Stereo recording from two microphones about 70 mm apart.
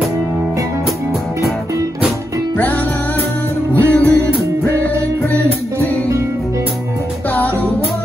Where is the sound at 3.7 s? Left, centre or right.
Left.